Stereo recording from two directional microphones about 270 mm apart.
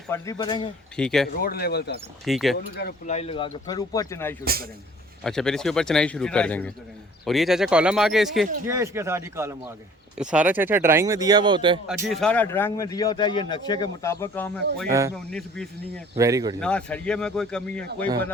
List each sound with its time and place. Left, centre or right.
0.1 s speech: centre
0.9 s speech: centre
1.4 s speech: left
2.2 s speech: centre
2.6 s speech: left
3.2 s speech: left
4.4 s a man's voice: right
5.2 s speech: centre
12.0 s speech: centre
16.1 s speech: centre
16.6 s speech: centre